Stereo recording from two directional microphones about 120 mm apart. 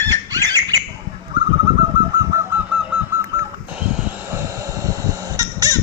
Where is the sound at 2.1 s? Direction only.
30° right (ahead or behind).